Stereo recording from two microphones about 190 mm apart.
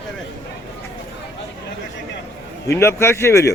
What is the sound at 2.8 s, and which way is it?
Speech, 15° left (ahead or behind).